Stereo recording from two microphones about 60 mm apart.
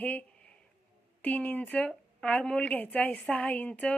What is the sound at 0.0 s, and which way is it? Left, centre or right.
A woman's voice, left.